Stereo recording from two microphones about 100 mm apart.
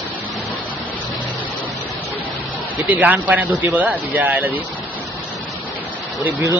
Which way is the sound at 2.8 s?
15° right (ahead or behind).